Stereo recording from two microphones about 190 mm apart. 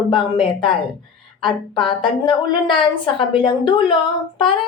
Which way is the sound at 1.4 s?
25° left (ahead or behind).